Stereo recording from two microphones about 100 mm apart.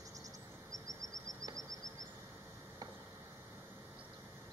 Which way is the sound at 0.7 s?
35° right (ahead or behind).